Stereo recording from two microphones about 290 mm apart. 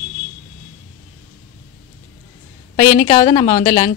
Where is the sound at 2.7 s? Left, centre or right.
Centre.